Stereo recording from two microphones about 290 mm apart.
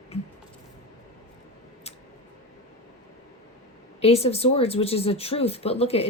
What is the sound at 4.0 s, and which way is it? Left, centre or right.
A woman's voice, left.